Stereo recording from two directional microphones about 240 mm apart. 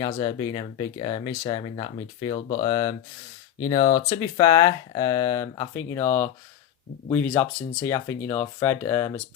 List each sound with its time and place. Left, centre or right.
0.1 s speech: centre